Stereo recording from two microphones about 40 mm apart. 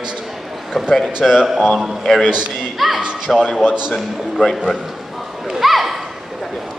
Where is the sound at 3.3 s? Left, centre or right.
Centre.